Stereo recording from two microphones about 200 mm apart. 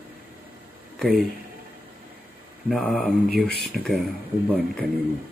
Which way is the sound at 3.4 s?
50° left (ahead or behind).